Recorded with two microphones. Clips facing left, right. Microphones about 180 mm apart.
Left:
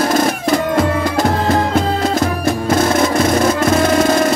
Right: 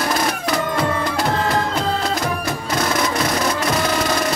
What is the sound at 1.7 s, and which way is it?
Music, 50° left (ahead or behind).